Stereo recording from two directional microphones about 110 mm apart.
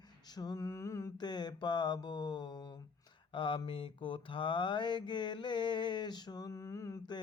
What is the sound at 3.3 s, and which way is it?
Mantra, 50° left (ahead or behind).